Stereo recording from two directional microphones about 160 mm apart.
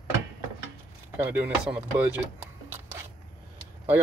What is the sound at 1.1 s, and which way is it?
Speech, 10° right (ahead or behind).